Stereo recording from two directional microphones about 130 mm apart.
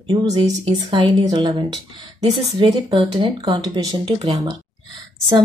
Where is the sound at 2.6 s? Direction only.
40° right (ahead or behind).